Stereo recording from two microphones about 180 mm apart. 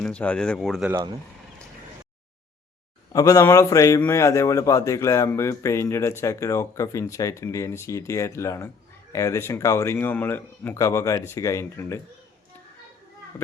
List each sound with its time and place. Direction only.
0.0 s speech: 5° left (ahead or behind)
3.1 s a man's voice: 20° left (ahead or behind)